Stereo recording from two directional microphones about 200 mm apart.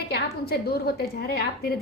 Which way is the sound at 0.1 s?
50° left (ahead or behind).